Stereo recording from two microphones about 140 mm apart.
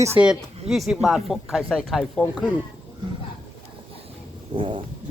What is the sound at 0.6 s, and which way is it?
Speech, centre (ahead or behind).